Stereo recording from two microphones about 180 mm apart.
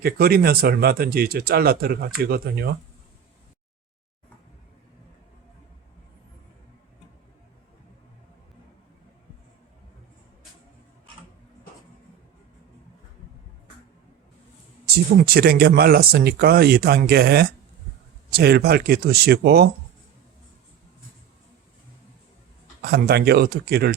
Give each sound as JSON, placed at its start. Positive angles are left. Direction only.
{"t": 0.0, "sound": "speech", "side_deg": -60}
{"t": 14.8, "sound": "speech", "side_deg": -60}
{"t": 22.8, "sound": "speech", "side_deg": -60}